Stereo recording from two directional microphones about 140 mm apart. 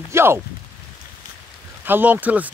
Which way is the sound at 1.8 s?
15° right (ahead or behind).